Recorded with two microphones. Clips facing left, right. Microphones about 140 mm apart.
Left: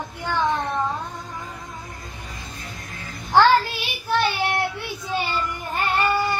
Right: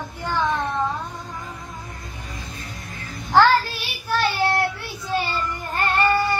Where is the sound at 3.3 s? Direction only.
20° left (ahead or behind).